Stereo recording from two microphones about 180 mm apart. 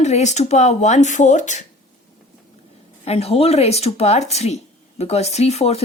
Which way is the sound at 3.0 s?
35° left (ahead or behind).